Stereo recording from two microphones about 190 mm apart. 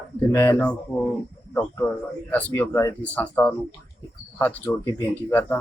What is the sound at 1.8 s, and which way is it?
Speech, 10° left (ahead or behind).